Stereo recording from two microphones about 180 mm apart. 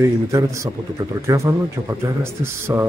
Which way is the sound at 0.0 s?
15° right (ahead or behind).